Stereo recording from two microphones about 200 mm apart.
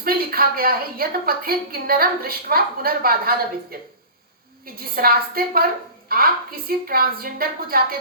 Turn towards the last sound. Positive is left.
turn(degrees=-50)  # may be behind; listen again after turning